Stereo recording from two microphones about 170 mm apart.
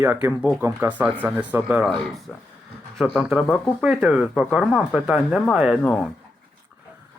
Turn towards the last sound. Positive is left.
turn(degrees=10)  # may be behind; listen again after turning